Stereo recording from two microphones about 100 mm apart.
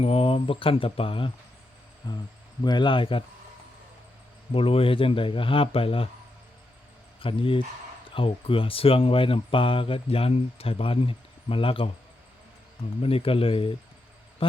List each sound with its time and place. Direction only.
0.0 s speech: 70° left (ahead or behind)
2.0 s speech: 50° left (ahead or behind)
4.5 s speech: 65° left (ahead or behind)
7.2 s speech: 65° left (ahead or behind)
13.0 s speech: 70° left (ahead or behind)